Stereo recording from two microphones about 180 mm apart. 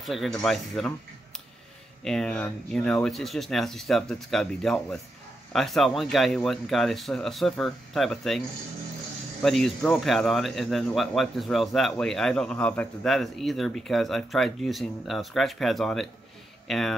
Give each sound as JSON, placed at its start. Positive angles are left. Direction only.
{"t": 0.0, "sound": "speech", "side_deg": 0}
{"t": 2.0, "sound": "speech", "side_deg": 5}